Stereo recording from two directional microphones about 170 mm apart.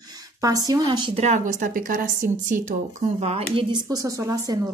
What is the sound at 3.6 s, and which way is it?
Speech, 25° right (ahead or behind).